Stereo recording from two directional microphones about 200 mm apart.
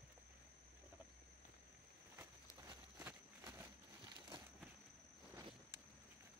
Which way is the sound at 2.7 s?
15° right (ahead or behind).